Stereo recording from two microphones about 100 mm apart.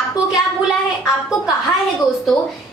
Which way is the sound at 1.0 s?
35° left (ahead or behind).